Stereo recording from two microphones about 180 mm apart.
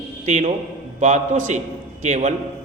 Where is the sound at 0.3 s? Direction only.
40° right (ahead or behind).